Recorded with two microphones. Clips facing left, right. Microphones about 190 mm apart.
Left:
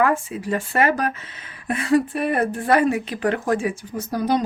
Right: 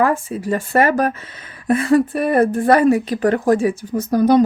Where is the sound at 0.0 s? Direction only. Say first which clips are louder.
Right 3 dB; 40° right (ahead or behind).